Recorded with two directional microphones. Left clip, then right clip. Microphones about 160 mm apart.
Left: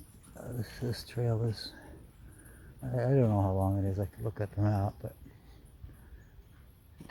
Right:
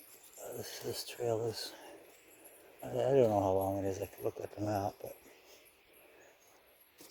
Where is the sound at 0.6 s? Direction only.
15° right (ahead or behind).